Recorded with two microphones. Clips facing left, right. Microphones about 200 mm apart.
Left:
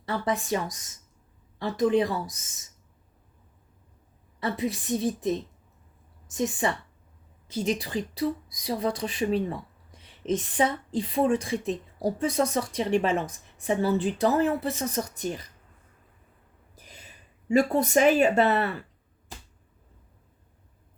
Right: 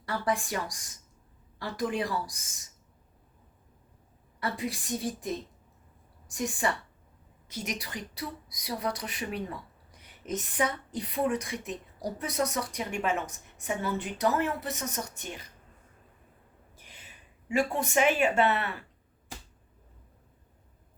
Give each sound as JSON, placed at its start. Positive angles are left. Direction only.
{"t": 0.0, "sound": "a woman's voice", "side_deg": 25}
{"t": 4.4, "sound": "a woman's voice", "side_deg": 25}
{"t": 16.7, "sound": "a sound", "side_deg": 40}
{"t": 17.5, "sound": "speech", "side_deg": 40}